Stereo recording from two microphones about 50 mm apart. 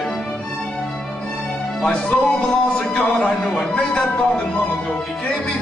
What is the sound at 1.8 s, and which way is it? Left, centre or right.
Speech, left.